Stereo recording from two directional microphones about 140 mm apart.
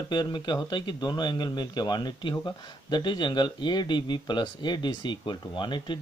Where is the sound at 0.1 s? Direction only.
30° left (ahead or behind).